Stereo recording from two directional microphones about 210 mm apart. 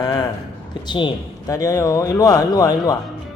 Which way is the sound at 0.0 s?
20° left (ahead or behind).